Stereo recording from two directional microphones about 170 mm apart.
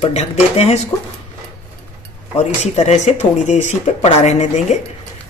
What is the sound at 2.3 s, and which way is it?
Speech, 40° left (ahead or behind).